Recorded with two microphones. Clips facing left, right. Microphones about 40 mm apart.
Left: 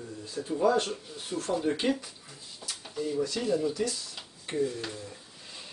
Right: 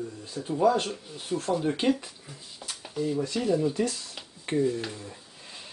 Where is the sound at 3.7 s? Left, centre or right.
Right.